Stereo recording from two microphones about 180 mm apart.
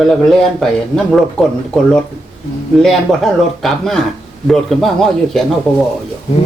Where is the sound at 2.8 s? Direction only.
Centre (ahead or behind).